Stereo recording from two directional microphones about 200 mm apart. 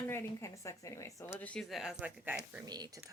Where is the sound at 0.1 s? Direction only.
15° left (ahead or behind); by 2.6 s 10° right (ahead or behind).